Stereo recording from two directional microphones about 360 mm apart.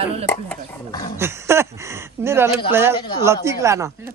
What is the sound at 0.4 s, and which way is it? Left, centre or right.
Speech, centre.